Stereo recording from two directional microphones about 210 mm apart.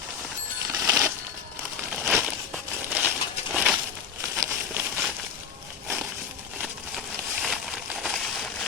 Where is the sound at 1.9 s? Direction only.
Centre (ahead or behind).